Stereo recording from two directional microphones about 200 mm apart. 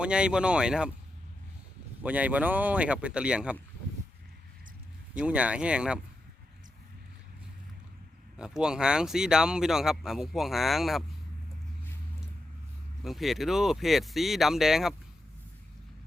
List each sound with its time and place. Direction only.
0.0 s speech: 5° right (ahead or behind)
2.0 s speech: 5° right (ahead or behind)
5.1 s speech: 5° right (ahead or behind)
8.4 s speech: 5° right (ahead or behind)
13.0 s speech: centre (ahead or behind)